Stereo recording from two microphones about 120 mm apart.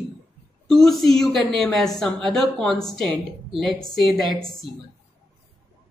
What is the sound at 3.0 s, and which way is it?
Speech, 45° right (ahead or behind).